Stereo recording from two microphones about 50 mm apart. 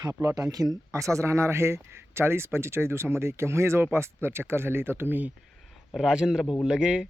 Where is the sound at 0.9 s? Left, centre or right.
Right.